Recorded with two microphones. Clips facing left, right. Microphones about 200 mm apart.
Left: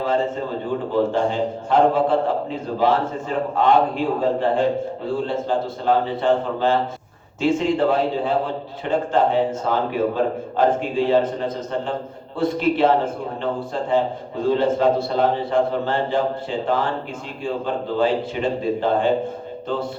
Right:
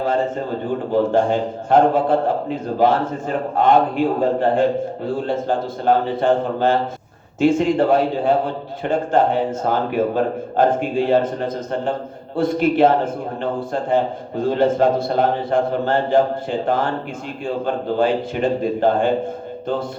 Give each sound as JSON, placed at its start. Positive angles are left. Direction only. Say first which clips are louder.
{"t": 1.1, "sound": "a man's voice", "louder": "right 3 dB", "side_deg": -45}
{"t": 13.9, "sound": "a man's voice", "louder": "right 1 dB", "side_deg": -45}
{"t": 18.0, "sound": "a man's voice", "louder": "right 2 dB", "side_deg": -45}